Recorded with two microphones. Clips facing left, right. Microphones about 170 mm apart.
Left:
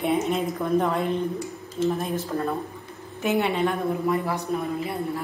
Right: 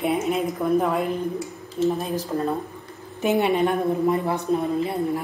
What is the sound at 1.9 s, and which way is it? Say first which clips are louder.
A woman's voice: right 1 dB; 20° right (ahead or behind).